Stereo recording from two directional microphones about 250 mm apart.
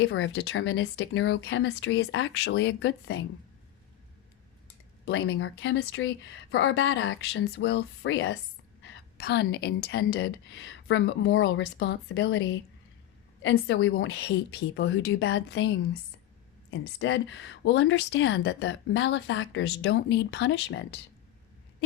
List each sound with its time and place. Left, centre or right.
0.0 s speech: left
5.0 s speech: left
13.4 s speech: left